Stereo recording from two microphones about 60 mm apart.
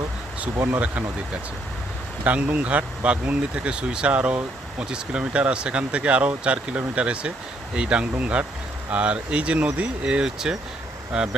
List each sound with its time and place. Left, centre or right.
0.5 s speech: right
2.2 s speech: right